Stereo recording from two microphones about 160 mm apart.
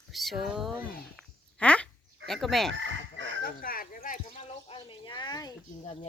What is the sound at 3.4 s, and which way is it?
Speech, 65° left (ahead or behind).